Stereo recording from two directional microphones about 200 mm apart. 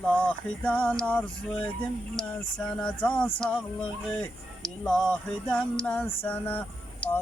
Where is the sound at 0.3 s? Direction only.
5° left (ahead or behind).